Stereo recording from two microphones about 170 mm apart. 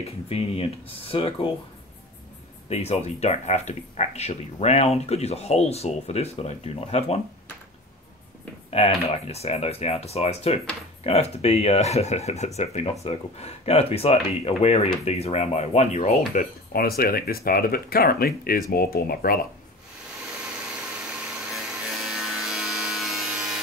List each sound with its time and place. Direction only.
0.0 s speech: 35° left (ahead or behind)
2.7 s speech: 40° left (ahead or behind)
8.6 s speech: 35° left (ahead or behind)
16.7 s speech: 60° left (ahead or behind)
22.0 s wood: 5° right (ahead or behind)